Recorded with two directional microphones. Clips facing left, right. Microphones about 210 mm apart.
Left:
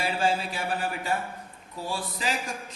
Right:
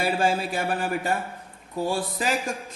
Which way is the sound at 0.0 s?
50° right (ahead or behind).